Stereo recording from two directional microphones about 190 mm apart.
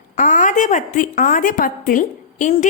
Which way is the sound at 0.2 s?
45° left (ahead or behind).